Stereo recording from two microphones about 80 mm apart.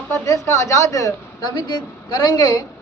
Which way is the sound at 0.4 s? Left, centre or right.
Left.